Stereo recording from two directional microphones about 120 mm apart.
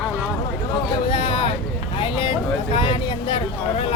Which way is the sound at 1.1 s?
45° left (ahead or behind).